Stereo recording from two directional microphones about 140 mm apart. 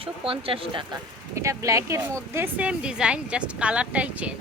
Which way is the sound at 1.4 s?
20° right (ahead or behind).